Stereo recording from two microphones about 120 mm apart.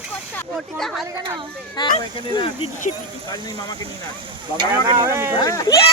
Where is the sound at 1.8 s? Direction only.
40° left (ahead or behind).